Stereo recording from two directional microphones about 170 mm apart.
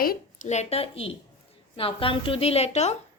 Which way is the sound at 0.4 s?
40° left (ahead or behind).